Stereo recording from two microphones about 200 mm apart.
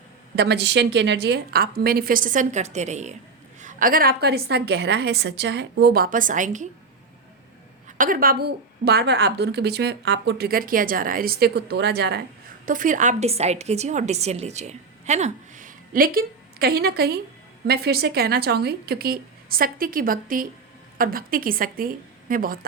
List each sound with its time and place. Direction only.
0.3 s a woman's voice: 55° right (ahead or behind); by 6.7 s 40° right (ahead or behind)
7.9 s a woman's voice: 40° right (ahead or behind)
12.6 s a woman's voice: 40° right (ahead or behind)